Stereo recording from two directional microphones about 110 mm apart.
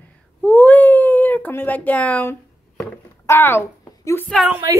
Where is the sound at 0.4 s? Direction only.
15° left (ahead or behind).